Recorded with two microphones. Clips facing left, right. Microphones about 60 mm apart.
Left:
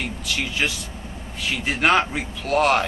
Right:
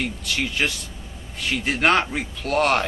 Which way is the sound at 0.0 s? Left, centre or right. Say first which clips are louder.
Right 1 dB; centre.